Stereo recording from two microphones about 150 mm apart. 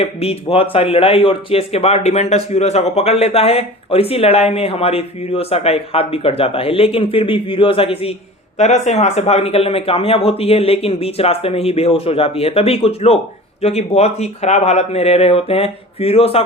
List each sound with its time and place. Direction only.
0.0 s speech: 40° left (ahead or behind)
8.5 s speech: 50° left (ahead or behind)